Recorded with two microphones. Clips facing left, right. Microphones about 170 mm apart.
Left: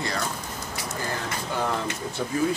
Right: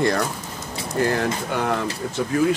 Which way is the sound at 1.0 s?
75° right (ahead or behind).